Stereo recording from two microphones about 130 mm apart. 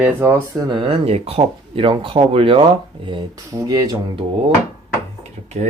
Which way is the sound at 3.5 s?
30° right (ahead or behind).